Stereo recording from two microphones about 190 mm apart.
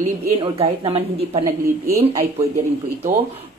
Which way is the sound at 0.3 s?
30° right (ahead or behind).